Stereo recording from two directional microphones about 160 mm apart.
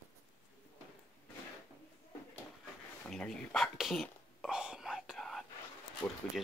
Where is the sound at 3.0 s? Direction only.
5° left (ahead or behind).